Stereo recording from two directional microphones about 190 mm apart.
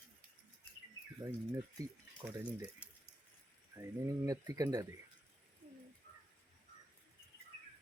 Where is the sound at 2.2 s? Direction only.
5° right (ahead or behind).